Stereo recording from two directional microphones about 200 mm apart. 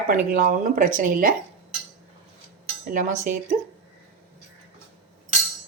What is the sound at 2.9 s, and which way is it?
Speech, 40° right (ahead or behind).